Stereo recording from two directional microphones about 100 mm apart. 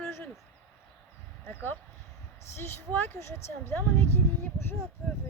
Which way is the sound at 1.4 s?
20° left (ahead or behind).